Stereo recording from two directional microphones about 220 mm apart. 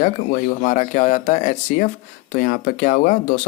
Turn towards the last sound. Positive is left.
turn(degrees=40)  # may be behind; listen again after turning